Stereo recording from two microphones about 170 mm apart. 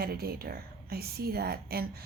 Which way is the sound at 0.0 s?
65° right (ahead or behind).